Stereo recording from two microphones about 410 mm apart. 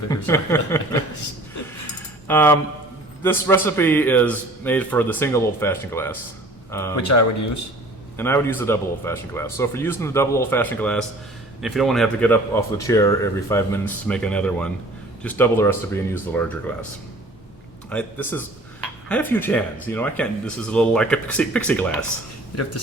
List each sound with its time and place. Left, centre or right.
0.1 s a sound: centre
2.2 s speech: centre
7.1 s speech: left
8.2 s speech: centre
17.8 s speech: centre